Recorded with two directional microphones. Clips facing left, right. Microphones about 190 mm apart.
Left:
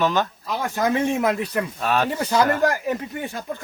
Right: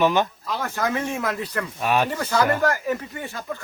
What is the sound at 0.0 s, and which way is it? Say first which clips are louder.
Speech: right 2 dB; 15° right (ahead or behind).